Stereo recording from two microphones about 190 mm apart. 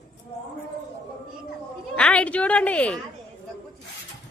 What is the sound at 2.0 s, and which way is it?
A woman's voice, 5° left (ahead or behind).